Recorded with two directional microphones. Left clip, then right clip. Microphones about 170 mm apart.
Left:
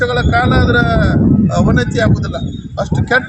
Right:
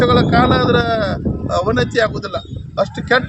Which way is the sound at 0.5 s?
35° right (ahead or behind).